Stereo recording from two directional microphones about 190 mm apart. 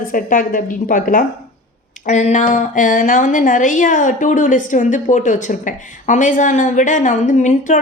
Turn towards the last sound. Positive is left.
turn(degrees=40)  # may be behind; listen again after turning